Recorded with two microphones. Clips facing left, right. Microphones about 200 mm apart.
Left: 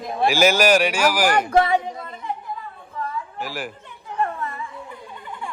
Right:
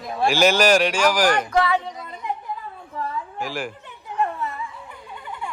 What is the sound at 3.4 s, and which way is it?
Speech, 5° left (ahead or behind).